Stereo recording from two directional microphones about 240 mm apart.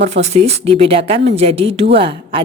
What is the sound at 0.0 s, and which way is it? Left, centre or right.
A woman's voice, right.